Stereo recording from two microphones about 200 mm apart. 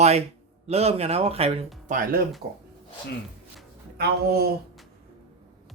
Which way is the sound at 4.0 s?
50° right (ahead or behind).